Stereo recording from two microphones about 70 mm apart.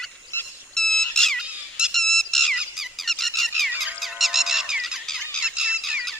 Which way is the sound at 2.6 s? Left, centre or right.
Centre.